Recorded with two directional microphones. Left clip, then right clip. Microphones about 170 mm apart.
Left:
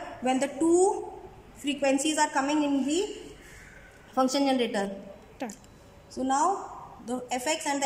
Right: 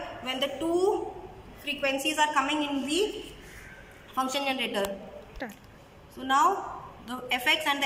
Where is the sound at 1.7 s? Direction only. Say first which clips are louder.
Left 2 dB; 70° left (ahead or behind).